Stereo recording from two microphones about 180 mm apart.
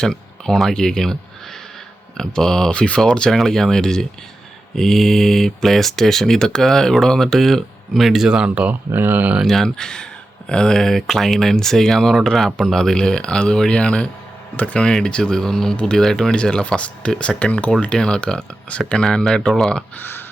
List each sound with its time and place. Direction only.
0.0 s speech: 5° left (ahead or behind)